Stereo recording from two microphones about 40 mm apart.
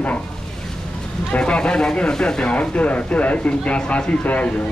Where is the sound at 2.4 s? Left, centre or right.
Left.